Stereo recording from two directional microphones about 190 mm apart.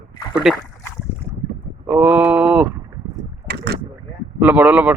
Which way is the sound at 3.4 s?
60° right (ahead or behind).